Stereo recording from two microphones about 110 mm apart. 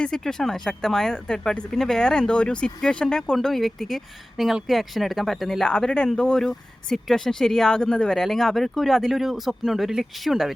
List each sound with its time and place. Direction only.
0.0 s speech: 5° left (ahead or behind)